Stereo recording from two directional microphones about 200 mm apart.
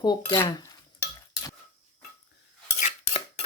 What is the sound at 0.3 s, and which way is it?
Cutlery, 20° left (ahead or behind).